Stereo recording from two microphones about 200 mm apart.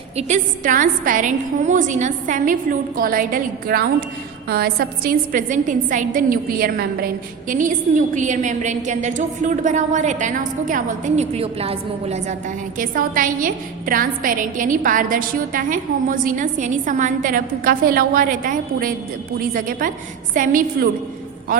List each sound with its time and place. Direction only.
0.2 s a woman's voice: 40° right (ahead or behind)
12.8 s a woman's voice: 45° right (ahead or behind)